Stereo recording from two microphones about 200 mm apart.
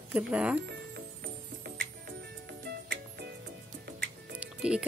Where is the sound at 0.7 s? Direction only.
55° right (ahead or behind).